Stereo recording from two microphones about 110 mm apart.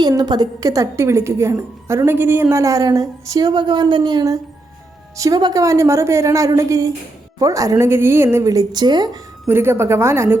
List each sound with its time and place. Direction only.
0.2 s a woman's voice: 35° right (ahead or behind)
9.5 s a woman's voice: 20° right (ahead or behind)